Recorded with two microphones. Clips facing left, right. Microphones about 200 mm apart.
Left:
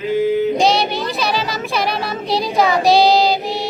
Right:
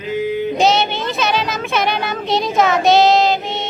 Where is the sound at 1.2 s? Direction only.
Centre (ahead or behind).